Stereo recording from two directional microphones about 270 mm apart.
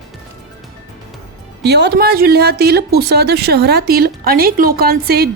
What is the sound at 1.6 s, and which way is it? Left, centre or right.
Speech, right.